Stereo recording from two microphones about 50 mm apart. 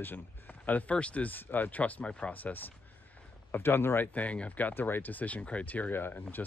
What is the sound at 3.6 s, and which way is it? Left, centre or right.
Speech, left.